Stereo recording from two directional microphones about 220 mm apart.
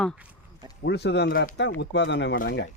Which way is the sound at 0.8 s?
50° left (ahead or behind).